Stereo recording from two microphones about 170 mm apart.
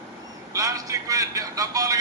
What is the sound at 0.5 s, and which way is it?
A man's voice, 20° right (ahead or behind).